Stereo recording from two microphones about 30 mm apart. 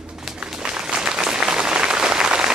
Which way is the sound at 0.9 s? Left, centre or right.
Right.